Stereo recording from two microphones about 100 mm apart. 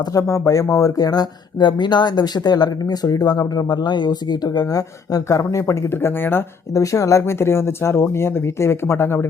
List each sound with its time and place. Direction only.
0.1 s speech: 30° left (ahead or behind)
6.7 s speech: 30° left (ahead or behind)